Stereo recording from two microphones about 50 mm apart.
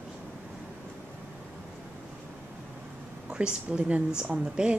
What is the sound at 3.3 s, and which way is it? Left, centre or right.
A woman's voice, right.